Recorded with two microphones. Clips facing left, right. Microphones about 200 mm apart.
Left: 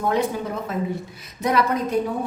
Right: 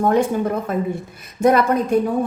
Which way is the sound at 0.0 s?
50° right (ahead or behind).